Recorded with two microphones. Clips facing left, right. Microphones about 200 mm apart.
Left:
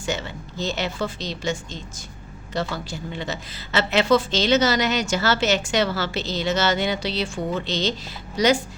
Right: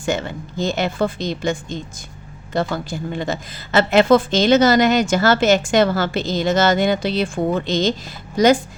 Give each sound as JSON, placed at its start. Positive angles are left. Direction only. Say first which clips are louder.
{"t": 0.0, "sound": "a woman's voice", "louder": "right 6 dB", "side_deg": -50}